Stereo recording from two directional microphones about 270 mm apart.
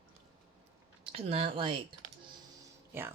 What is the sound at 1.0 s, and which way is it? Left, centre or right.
Speech, right.